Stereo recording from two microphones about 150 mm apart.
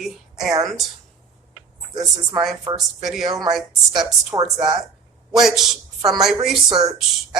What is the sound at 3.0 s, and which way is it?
A woman's voice, centre (ahead or behind).